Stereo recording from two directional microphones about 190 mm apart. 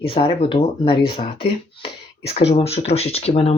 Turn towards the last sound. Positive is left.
turn(degrees=30)  # may be behind; listen again after turning